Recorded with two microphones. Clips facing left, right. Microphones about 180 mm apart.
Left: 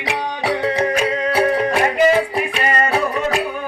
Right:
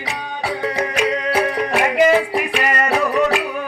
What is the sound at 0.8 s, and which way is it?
Music, 30° left (ahead or behind).